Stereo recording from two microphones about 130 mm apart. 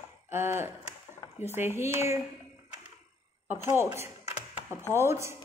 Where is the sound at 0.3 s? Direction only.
20° right (ahead or behind).